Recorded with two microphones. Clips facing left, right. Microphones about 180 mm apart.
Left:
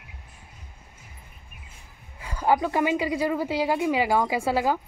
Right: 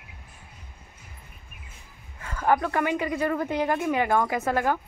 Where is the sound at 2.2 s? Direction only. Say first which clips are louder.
Left 1 dB; 15° left (ahead or behind).